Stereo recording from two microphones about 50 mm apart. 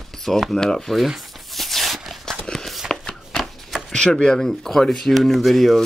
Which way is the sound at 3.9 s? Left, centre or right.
Centre.